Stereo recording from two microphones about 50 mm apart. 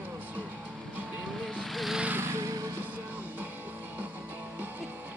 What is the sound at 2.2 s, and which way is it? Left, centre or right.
Music, right.